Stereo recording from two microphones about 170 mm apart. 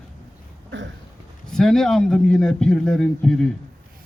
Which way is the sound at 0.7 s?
90° right.